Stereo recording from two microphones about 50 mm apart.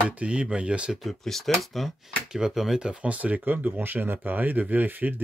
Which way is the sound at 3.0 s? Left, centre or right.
Right.